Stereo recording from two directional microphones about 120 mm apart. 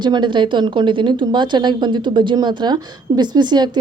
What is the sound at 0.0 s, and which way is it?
A woman's voice, 40° right (ahead or behind).